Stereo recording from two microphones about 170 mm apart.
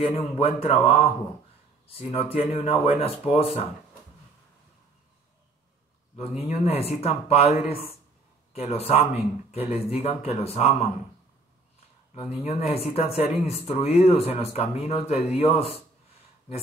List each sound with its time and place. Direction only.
0.0 s speech: 35° left (ahead or behind)
6.6 s speech: 35° left (ahead or behind)
12.1 s speech: 35° left (ahead or behind)